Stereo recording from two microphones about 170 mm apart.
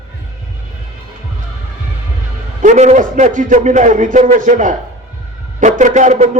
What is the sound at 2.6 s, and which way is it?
A man's voice, 45° right (ahead or behind).